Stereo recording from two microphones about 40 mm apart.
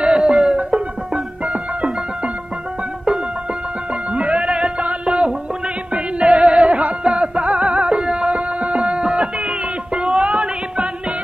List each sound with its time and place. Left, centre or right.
0.1 s music: centre
0.6 s music: right
4.1 s music: right